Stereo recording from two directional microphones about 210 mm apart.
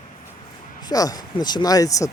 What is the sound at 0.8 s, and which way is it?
Speech, 20° left (ahead or behind).